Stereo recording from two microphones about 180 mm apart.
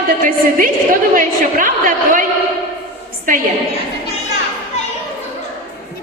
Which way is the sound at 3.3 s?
50° right (ahead or behind).